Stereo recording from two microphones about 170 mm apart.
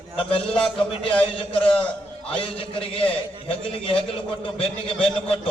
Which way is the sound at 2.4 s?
30° left (ahead or behind).